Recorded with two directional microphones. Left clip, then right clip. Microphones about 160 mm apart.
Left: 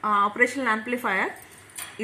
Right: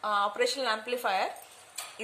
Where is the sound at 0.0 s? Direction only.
10° right (ahead or behind).